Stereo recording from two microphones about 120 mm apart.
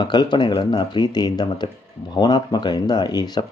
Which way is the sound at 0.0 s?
35° left (ahead or behind).